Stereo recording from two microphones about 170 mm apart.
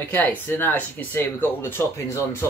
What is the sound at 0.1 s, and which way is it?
Speech, 10° left (ahead or behind).